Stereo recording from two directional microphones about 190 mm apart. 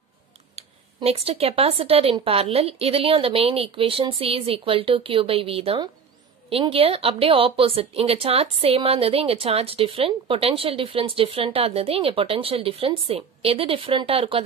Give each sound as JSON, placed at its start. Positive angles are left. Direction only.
{"t": 0.6, "sound": "a woman's voice", "side_deg": -30}